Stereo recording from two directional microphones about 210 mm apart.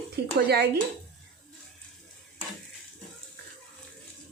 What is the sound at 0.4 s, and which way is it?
Speech, 50° right (ahead or behind).